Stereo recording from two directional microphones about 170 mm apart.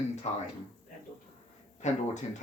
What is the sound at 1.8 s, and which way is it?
Speech, 45° left (ahead or behind).